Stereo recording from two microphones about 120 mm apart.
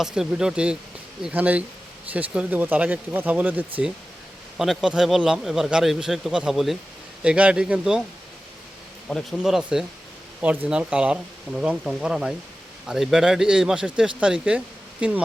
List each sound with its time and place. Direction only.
0.0 s speech: 5° right (ahead or behind)
4.5 s speech: centre (ahead or behind)
9.0 s speech: centre (ahead or behind)